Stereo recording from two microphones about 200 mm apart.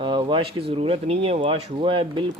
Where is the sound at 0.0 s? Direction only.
25° right (ahead or behind).